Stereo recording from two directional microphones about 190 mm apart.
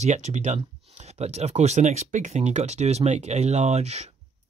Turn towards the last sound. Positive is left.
turn(degrees=-35)  # may be behind; listen again after turning